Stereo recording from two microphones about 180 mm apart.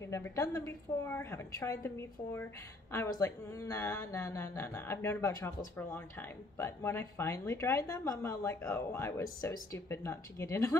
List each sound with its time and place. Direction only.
0.1 s speech: 15° left (ahead or behind)